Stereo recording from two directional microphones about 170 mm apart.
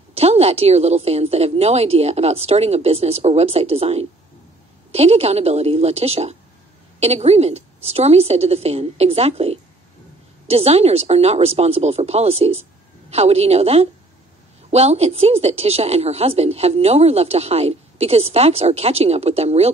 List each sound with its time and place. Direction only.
0.1 s a woman's voice: 40° right (ahead or behind)